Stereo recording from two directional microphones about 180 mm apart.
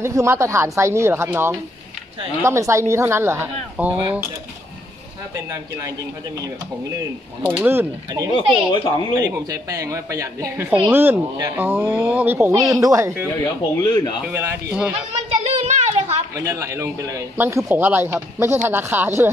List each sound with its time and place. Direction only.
0.0 s a man's voice: 15° right (ahead or behind)
5.3 s a man's voice: 20° right (ahead or behind)
8.4 s speech: 25° left (ahead or behind)
9.1 s a man's voice: 20° right (ahead or behind)
15.4 s a sound: 40° right (ahead or behind)
16.3 s a man's voice: 15° right (ahead or behind)